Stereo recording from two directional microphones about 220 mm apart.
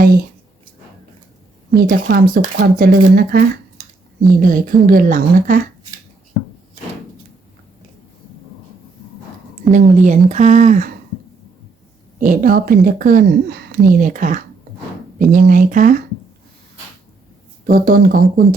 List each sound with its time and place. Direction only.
1.7 s speech: 40° right (ahead or behind)
9.7 s speech: 35° right (ahead or behind)
12.2 s speech: 35° right (ahead or behind)
17.7 s speech: 40° right (ahead or behind)